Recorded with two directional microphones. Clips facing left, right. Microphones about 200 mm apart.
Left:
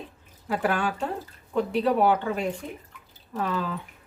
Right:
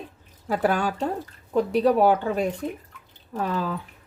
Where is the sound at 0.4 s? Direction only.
40° right (ahead or behind).